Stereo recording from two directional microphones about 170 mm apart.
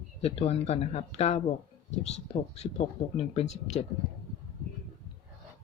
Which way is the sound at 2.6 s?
40° left (ahead or behind).